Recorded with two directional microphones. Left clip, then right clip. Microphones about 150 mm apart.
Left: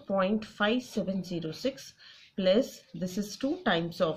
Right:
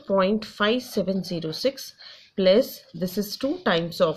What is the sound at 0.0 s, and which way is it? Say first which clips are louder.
Speech: right 7 dB; 30° right (ahead or behind).